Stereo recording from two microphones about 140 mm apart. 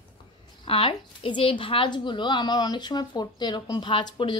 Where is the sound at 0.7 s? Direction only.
40° left (ahead or behind).